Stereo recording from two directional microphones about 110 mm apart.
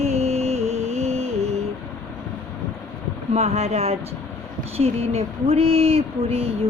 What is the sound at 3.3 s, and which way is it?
Speech, 70° right (ahead or behind).